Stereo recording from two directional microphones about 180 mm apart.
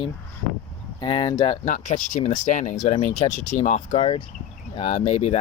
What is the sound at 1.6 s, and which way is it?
Speech, 45° left (ahead or behind).